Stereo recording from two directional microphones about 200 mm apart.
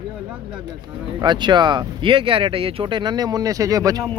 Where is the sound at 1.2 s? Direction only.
20° right (ahead or behind).